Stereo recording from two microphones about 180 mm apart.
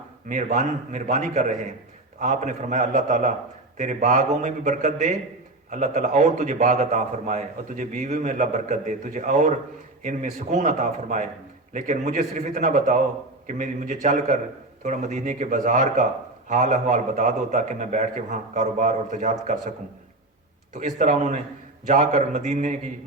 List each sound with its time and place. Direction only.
0.3 s a man's voice: 45° right (ahead or behind)
20.7 s a man's voice: 40° right (ahead or behind)